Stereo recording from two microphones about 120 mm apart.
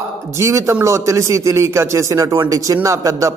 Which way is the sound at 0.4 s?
25° right (ahead or behind).